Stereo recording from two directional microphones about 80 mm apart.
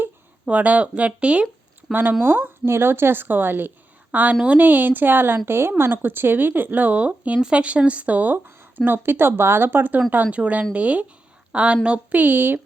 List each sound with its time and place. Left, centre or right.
0.4 s a woman's voice: centre